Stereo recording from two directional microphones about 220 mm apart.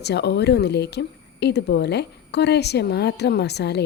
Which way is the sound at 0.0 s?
50° left (ahead or behind).